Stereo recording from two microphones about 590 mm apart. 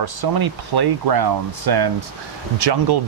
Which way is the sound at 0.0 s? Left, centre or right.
Right.